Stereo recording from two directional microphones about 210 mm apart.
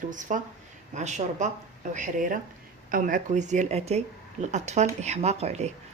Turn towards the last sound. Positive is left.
turn(degrees=-30)  # may be behind; listen again after turning